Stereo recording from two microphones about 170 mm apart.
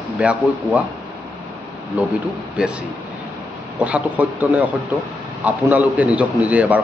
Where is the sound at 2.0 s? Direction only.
10° right (ahead or behind).